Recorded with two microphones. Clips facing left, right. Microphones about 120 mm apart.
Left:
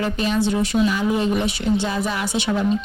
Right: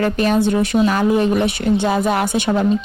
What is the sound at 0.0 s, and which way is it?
A woman's voice, 55° right (ahead or behind).